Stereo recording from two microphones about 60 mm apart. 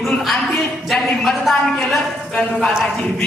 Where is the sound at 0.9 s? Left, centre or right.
Centre.